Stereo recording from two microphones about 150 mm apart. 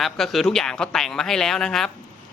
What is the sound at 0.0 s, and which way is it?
A man's voice, centre (ahead or behind).